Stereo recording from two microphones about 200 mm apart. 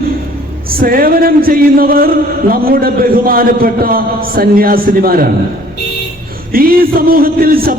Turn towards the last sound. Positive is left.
turn(degrees=-45)  # may be behind; listen again after turning